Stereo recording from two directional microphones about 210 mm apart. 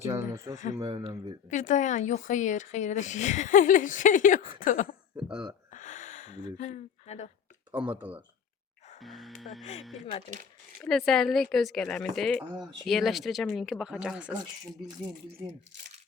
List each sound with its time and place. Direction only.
0.0 s speech: 15° right (ahead or behind)
1.5 s speech: 35° left (ahead or behind)
5.1 s speech: 5° right (ahead or behind)
5.7 s gasp: 35° left (ahead or behind)
7.9 s speech: 5° right (ahead or behind)
9.0 s music: centre (ahead or behind)
10.8 s speech: centre (ahead or behind)